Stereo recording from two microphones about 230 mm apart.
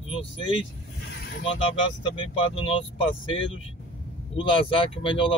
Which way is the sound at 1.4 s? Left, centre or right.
Left.